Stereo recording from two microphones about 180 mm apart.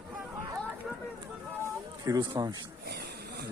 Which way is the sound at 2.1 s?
25° right (ahead or behind).